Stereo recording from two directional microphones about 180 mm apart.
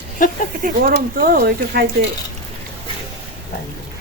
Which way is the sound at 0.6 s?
55° right (ahead or behind).